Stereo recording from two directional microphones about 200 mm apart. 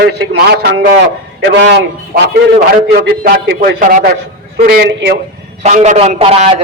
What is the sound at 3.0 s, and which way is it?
A man's voice, 50° right (ahead or behind).